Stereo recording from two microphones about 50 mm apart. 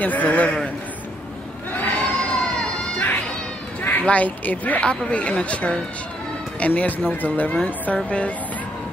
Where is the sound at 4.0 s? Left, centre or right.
Left.